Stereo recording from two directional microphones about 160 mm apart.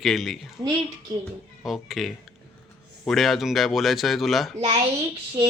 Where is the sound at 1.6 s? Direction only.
Centre (ahead or behind).